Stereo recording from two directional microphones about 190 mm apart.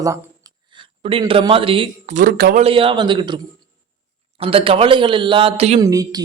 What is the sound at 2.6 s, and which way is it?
A man's voice, 30° right (ahead or behind).